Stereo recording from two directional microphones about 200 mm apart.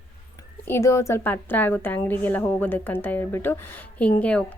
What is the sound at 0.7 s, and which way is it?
A woman's voice, 15° left (ahead or behind).